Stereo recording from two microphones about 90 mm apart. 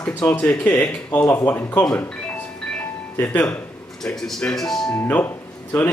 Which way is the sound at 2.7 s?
20° left (ahead or behind).